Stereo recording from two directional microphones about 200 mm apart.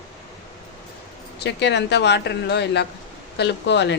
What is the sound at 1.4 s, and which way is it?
A woman's voice, 60° left (ahead or behind).